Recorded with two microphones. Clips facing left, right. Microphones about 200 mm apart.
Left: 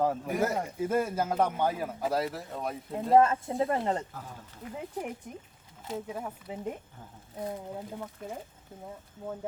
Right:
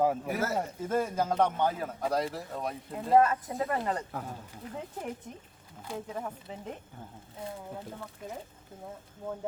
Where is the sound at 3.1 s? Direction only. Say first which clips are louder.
Left 1 dB; 25° left (ahead or behind).